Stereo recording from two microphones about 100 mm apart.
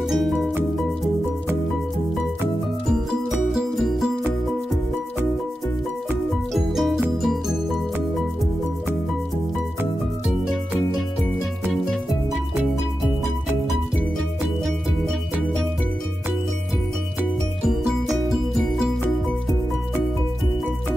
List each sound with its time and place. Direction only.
0.0 s music: centre (ahead or behind)
2.9 s music: centre (ahead or behind)
6.5 s music: centre (ahead or behind)
10.4 s music: 5° right (ahead or behind)
17.6 s music: centre (ahead or behind)